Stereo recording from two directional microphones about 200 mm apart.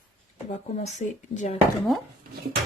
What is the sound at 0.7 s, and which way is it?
Speech, 35° left (ahead or behind).